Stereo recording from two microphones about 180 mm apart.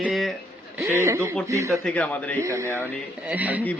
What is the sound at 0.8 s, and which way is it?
A woman's voice, 15° right (ahead or behind).